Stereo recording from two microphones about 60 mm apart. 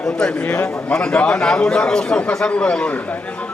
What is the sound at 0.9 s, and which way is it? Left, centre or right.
A man's voice, centre.